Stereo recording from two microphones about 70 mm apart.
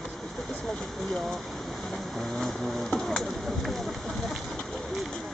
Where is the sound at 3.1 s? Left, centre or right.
Centre.